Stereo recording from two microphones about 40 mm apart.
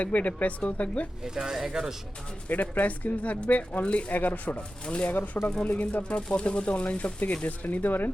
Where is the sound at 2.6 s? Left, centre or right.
Left.